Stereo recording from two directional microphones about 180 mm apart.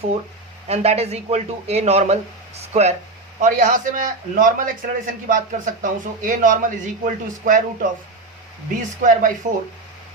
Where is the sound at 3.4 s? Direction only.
45° right (ahead or behind).